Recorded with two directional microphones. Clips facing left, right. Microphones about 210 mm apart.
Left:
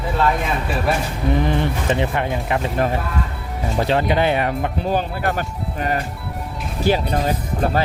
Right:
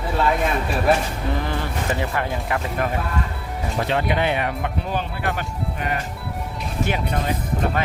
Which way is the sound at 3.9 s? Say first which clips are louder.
Left 4 dB; 35° left (ahead or behind).